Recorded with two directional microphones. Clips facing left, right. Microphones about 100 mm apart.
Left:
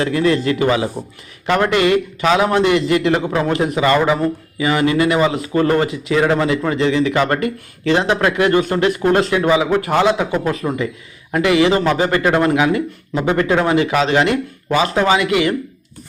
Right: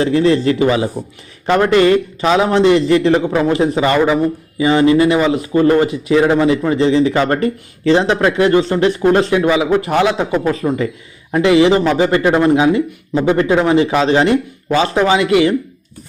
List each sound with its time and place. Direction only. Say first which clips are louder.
0.0 s a man's voice: right 3 dB; 30° right (ahead or behind)